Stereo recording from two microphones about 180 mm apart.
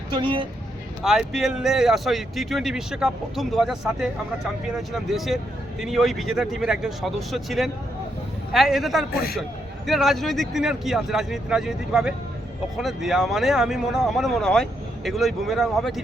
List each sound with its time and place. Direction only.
0.1 s speech: 25° right (ahead or behind)
1.0 s speech: 5° right (ahead or behind)